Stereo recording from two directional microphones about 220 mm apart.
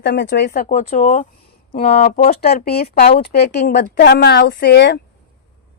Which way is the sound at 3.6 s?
35° left (ahead or behind).